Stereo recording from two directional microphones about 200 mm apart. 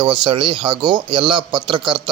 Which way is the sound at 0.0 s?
25° right (ahead or behind).